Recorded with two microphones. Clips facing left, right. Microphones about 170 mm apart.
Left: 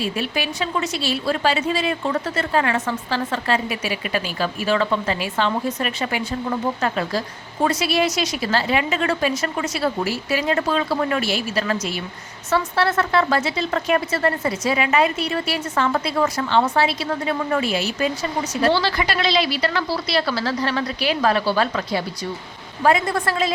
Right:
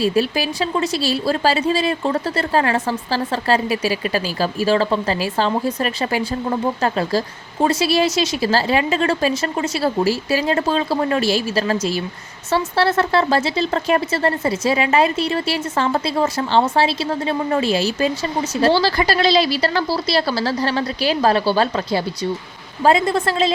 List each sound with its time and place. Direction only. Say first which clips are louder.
0.0 s a woman's voice: right 6 dB; 35° right (ahead or behind)